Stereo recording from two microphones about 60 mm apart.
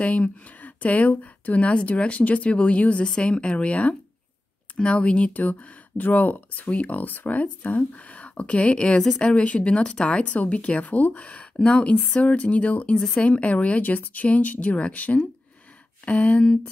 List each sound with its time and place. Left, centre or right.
0.0 s speech: left
12.9 s speech: centre
13.2 s speech: left